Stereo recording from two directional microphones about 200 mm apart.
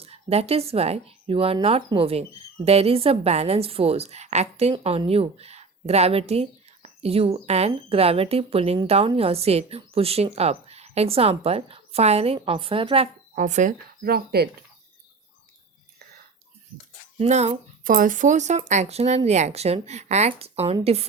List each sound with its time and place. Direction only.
0.0 s speech: 30° right (ahead or behind)
13.3 s speech: 40° right (ahead or behind)
17.2 s speech: 35° right (ahead or behind)
17.8 s speech: 45° right (ahead or behind)